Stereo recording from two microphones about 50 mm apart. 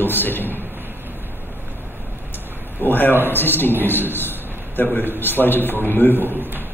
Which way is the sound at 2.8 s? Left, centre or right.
Left.